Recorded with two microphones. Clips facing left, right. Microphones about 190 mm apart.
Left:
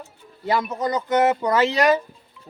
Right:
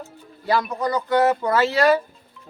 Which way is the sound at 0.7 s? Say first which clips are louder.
Right 1 dB; 20° left (ahead or behind).